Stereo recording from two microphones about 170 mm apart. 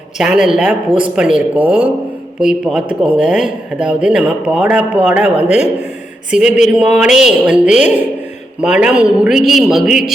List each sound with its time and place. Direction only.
0.2 s speech: 5° right (ahead or behind)